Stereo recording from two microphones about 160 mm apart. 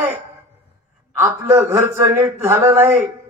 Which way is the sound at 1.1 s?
15° right (ahead or behind).